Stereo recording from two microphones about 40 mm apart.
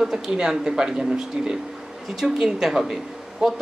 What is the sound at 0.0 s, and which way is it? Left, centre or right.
Speech, centre.